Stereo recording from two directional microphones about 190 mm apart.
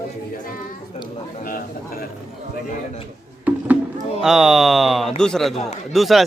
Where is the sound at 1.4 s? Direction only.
50° left (ahead or behind).